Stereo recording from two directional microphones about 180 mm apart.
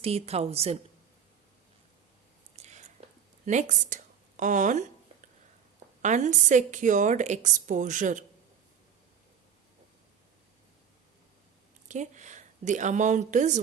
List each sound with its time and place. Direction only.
0.0 s a woman's voice: 35° right (ahead or behind)
2.6 s whispering: 40° right (ahead or behind)
3.4 s a sound: 40° right (ahead or behind)
6.0 s a woman's voice: 40° right (ahead or behind)
11.9 s speech: 40° right (ahead or behind)